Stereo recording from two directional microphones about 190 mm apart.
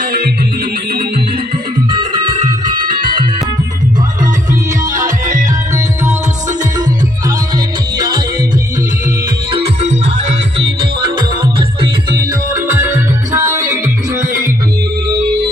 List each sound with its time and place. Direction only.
0.0 s music: 55° right (ahead or behind)
4.9 s music: 40° right (ahead or behind)
7.9 s music: 25° right (ahead or behind)
9.5 s music: 30° right (ahead or behind)
10.8 s music: 25° right (ahead or behind)
13.3 s music: 15° right (ahead or behind)